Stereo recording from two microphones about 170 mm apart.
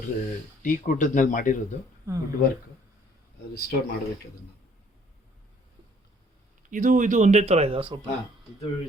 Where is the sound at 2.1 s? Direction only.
15° right (ahead or behind).